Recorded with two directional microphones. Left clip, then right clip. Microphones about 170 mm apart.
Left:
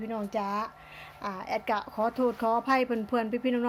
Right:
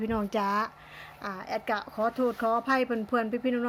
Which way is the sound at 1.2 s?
Centre (ahead or behind).